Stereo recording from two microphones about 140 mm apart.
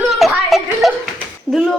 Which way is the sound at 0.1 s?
Centre (ahead or behind).